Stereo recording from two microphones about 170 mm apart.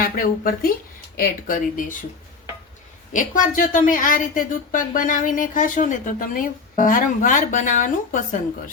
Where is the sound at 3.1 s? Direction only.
50° left (ahead or behind).